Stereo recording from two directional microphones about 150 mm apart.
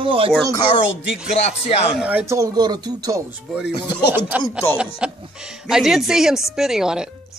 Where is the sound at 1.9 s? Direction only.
10° right (ahead or behind).